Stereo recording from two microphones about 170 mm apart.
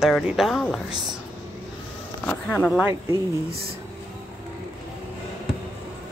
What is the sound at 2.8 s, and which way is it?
Speech, 15° right (ahead or behind).